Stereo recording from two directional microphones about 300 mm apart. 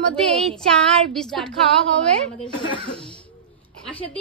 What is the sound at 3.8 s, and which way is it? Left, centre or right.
Speech, centre.